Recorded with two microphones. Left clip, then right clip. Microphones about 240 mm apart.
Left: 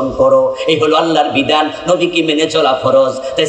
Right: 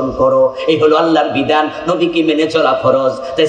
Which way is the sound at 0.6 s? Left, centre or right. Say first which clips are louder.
Right 1 dB; left.